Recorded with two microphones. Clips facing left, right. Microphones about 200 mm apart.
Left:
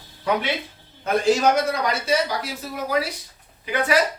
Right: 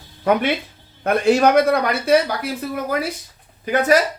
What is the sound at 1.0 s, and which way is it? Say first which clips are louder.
Speech: right 4 dB; 60° right (ahead or behind).